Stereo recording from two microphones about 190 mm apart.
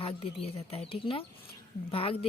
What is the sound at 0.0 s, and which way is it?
Speech, 30° left (ahead or behind).